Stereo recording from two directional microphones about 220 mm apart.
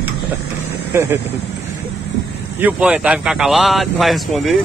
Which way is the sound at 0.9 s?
10° right (ahead or behind).